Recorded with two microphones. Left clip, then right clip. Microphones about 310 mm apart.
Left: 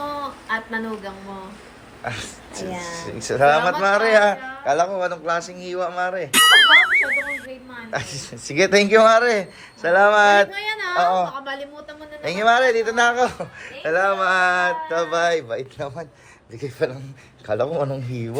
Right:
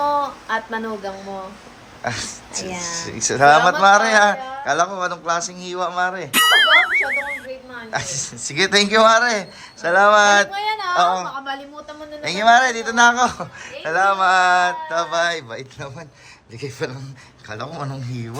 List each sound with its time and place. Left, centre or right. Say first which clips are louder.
0.1 s a sound: right 6 dB; centre
2.9 s speech: right 4 dB; centre
6.3 s music: left 1 dB; centre
7.9 s speech: right 3 dB; centre
17.5 s speech: left 8 dB; centre